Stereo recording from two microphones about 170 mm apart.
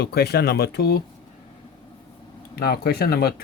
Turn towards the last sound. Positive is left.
turn(degrees=70)  # may be behind; listen again after turning